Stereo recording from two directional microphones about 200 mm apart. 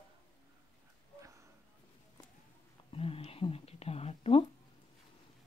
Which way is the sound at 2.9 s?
30° left (ahead or behind).